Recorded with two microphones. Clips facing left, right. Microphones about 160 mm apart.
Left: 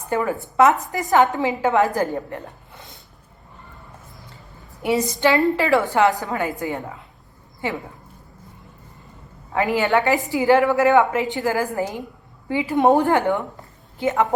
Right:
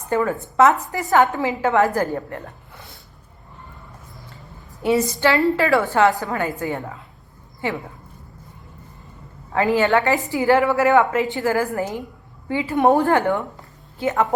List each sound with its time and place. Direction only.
0.1 s a woman's voice: 15° left (ahead or behind)
4.8 s a woman's voice: 15° left (ahead or behind)
9.6 s a woman's voice: 15° left (ahead or behind)